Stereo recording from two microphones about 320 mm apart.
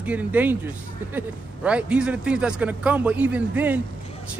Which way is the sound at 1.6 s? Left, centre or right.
Centre.